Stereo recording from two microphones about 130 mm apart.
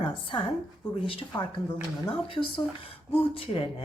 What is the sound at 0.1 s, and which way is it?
A woman's voice, 40° left (ahead or behind).